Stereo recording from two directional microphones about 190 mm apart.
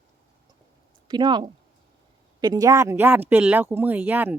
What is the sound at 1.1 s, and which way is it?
Speech, 25° right (ahead or behind).